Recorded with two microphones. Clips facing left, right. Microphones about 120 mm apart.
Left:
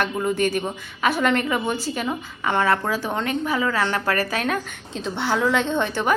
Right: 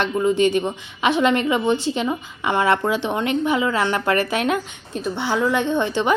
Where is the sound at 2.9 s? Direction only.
25° right (ahead or behind).